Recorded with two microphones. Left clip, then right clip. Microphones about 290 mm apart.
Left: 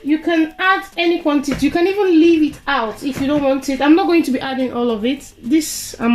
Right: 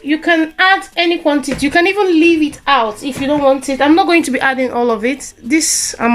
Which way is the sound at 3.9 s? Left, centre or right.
Right.